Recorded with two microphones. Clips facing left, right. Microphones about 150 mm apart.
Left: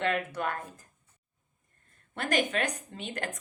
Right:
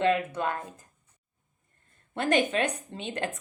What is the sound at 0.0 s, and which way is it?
Speech, 25° right (ahead or behind).